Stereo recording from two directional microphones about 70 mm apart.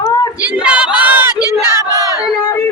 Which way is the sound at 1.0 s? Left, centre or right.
Right.